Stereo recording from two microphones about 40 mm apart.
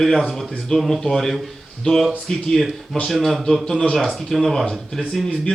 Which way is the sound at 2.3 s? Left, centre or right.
Centre.